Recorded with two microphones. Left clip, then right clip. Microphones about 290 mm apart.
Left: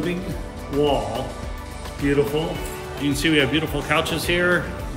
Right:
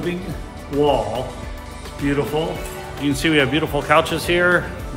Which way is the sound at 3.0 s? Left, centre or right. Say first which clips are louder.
Right 2 dB; centre.